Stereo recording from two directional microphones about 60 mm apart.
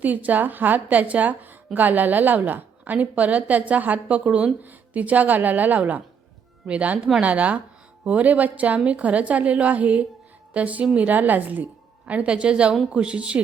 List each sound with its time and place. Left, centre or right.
0.0 s a woman's voice: right